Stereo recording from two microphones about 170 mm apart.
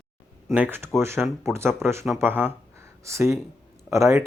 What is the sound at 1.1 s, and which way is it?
Speech, centre (ahead or behind).